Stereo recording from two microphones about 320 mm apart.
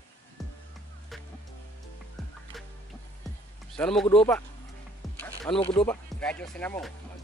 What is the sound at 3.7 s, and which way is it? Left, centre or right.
Speech, centre.